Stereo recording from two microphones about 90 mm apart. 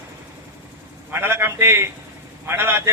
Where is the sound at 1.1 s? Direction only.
25° right (ahead or behind).